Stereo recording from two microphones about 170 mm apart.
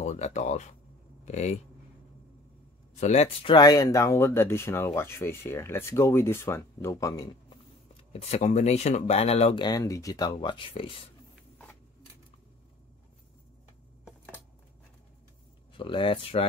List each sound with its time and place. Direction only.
0.0 s speech: 45° left (ahead or behind)
3.0 s speech: 40° left (ahead or behind)
3.5 s speech: 20° left (ahead or behind)
8.1 s speech: 40° left (ahead or behind)
14.0 s a sound: 10° left (ahead or behind)
15.8 s speech: 30° left (ahead or behind)